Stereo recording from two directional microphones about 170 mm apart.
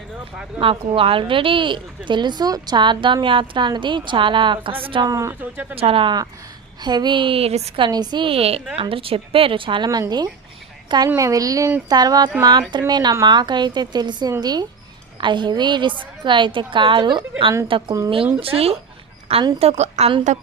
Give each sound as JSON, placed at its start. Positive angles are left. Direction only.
{"t": 0.6, "sound": "a woman's voice", "side_deg": -30}
{"t": 5.7, "sound": "a woman's voice", "side_deg": -35}
{"t": 7.9, "sound": "a woman's voice", "side_deg": -25}